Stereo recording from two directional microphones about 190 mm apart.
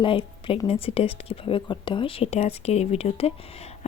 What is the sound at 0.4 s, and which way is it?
A woman's voice, 30° left (ahead or behind).